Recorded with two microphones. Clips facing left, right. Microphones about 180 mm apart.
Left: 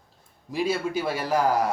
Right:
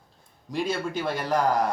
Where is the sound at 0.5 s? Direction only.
5° left (ahead or behind).